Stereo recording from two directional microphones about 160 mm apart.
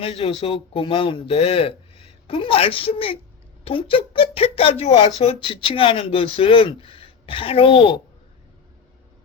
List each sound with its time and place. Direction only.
0.0 s speech: 35° left (ahead or behind)